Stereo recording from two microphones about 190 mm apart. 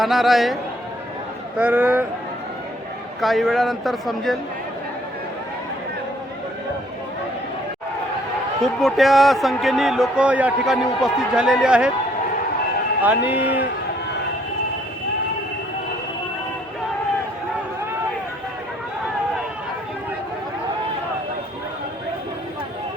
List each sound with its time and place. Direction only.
0.0 s a man's voice: centre (ahead or behind)
3.2 s a man's voice: centre (ahead or behind)
8.6 s a man's voice: centre (ahead or behind)
13.0 s a man's voice: 10° right (ahead or behind)